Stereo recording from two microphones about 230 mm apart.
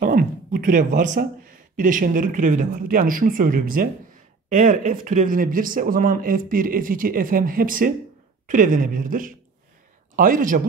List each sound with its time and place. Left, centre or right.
0.0 s speech: right